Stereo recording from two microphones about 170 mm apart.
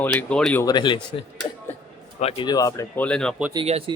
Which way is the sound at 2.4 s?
20° left (ahead or behind).